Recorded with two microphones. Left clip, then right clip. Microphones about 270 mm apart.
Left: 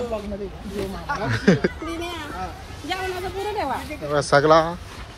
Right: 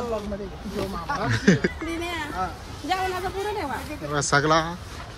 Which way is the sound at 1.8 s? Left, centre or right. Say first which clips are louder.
Right 1 dB; right.